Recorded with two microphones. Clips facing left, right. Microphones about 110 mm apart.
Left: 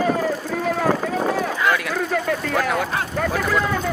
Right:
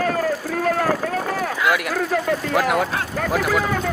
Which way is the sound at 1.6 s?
5° right (ahead or behind).